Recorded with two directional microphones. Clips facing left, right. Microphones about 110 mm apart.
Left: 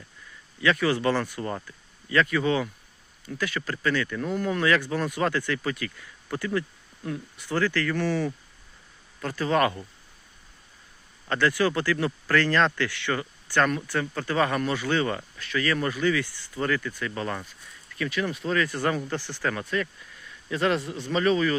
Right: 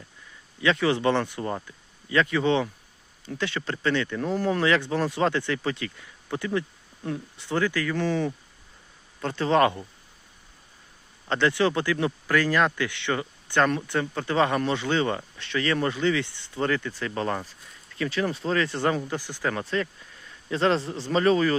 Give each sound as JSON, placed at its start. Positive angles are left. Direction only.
{"t": 0.6, "sound": "speech", "side_deg": -25}
{"t": 11.3, "sound": "speech", "side_deg": -25}
{"t": 19.5, "sound": "speech", "side_deg": -30}